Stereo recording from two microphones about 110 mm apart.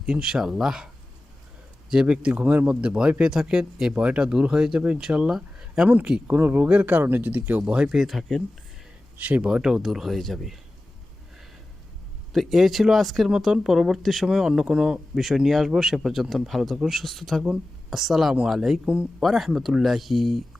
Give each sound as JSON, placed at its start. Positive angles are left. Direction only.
{"t": 0.0, "sound": "speech", "side_deg": -5}
{"t": 1.9, "sound": "speech", "side_deg": -5}
{"t": 9.1, "sound": "speech", "side_deg": -15}
{"t": 12.3, "sound": "speech", "side_deg": 0}